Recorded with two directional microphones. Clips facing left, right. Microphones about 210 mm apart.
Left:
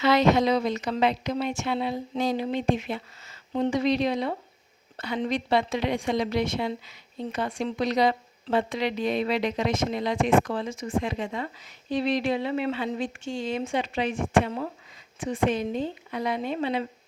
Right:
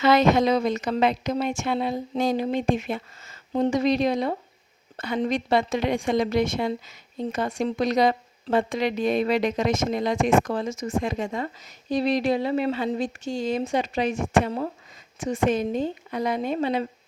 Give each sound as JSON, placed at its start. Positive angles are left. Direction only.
{"t": 0.0, "sound": "a woman's voice", "side_deg": -50}